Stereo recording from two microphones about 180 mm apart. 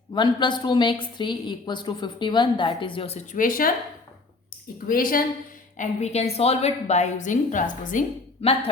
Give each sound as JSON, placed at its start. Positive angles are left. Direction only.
{"t": 0.1, "sound": "a woman's voice", "side_deg": 25}
{"t": 3.3, "sound": "speech", "side_deg": 50}
{"t": 4.9, "sound": "speech", "side_deg": 50}
{"t": 5.7, "sound": "a woman's voice", "side_deg": 40}
{"t": 8.4, "sound": "a woman's voice", "side_deg": 35}